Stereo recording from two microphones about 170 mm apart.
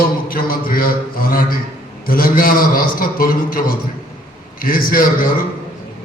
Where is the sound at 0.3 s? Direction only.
60° left (ahead or behind).